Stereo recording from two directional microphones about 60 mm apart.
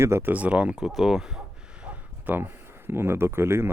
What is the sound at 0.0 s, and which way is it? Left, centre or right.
Speech, right.